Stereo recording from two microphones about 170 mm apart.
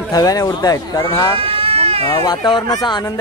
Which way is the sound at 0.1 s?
20° left (ahead or behind).